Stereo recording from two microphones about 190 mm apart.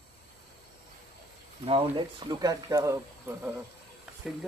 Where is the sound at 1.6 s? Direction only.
30° right (ahead or behind); by 3.4 s 10° right (ahead or behind).